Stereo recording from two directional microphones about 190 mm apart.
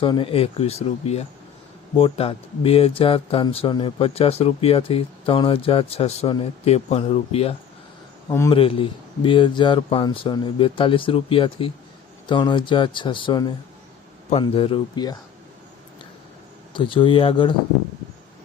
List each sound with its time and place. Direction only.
0.0 s speech: 25° left (ahead or behind)
8.3 s speech: 15° left (ahead or behind)
8.5 s speech: 30° left (ahead or behind)
16.7 s speech: 25° left (ahead or behind)